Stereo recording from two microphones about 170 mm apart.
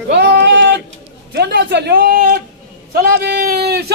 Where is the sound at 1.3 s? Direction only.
75° right (ahead or behind).